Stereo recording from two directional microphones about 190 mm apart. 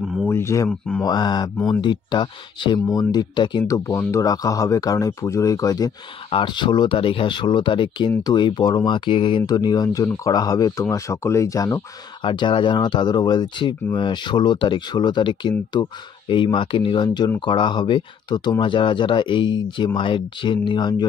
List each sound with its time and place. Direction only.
0.3 s speech: 15° left (ahead or behind)
0.7 s speech: 5° left (ahead or behind)
1.0 s speech: 20° left (ahead or behind)